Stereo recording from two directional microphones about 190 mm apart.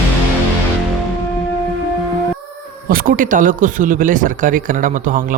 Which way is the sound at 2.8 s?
50° right (ahead or behind).